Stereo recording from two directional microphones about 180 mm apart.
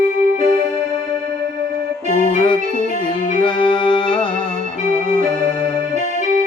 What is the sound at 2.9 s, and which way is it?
Music, 45° left (ahead or behind).